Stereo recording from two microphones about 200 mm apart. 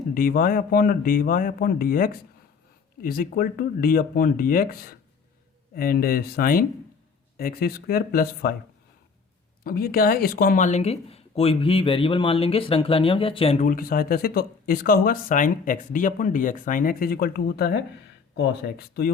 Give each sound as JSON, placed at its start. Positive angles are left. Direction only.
{"t": 0.1, "sound": "speech", "side_deg": 45}
{"t": 9.6, "sound": "speech", "side_deg": 50}
{"t": 13.7, "sound": "speech", "side_deg": 45}